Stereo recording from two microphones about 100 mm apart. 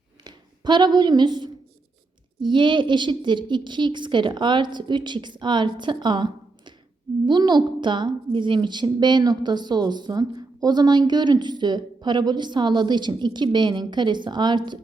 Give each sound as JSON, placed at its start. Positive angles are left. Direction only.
{"t": 0.3, "sound": "a woman's voice", "side_deg": -45}